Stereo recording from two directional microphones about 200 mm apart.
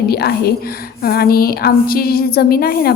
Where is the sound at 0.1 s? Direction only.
50° left (ahead or behind).